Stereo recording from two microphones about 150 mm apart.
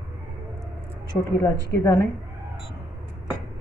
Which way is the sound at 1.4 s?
25° left (ahead or behind).